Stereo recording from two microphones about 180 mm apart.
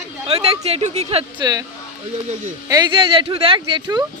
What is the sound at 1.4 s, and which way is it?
Speech, 20° right (ahead or behind).